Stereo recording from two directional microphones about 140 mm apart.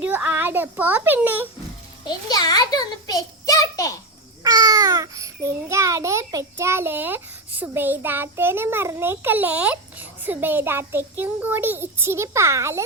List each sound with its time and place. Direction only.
0.0 s a child's voice: 10° right (ahead or behind)
2.0 s a child's voice: 30° left (ahead or behind)
4.4 s a child's voice: 25° right (ahead or behind)